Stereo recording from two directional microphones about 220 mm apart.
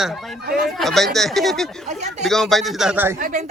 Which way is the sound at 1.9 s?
30° right (ahead or behind).